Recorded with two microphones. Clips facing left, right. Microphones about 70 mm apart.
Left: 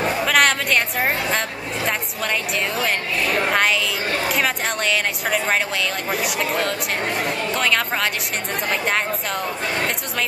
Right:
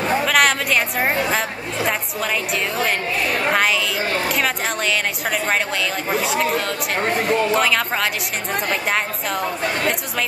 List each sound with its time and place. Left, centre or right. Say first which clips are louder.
0.2 s music: left 2 dB; centre
3.5 s speech: right 1 dB; centre
7.2 s speech: right 5 dB; centre